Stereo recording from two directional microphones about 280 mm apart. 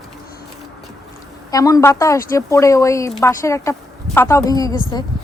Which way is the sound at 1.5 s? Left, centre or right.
Centre.